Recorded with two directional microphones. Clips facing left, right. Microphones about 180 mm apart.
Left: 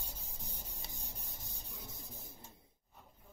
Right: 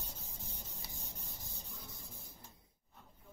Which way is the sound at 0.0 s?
15° left (ahead or behind).